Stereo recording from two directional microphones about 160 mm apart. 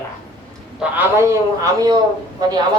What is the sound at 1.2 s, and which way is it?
Speech, 20° right (ahead or behind).